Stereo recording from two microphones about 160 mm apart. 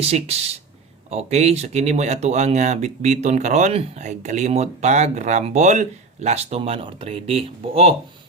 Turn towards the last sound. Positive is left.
turn(degrees=-35)  # may be behind; listen again after turning